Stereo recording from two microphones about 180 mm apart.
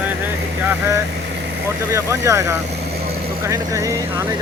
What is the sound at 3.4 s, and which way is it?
Speech, 15° right (ahead or behind).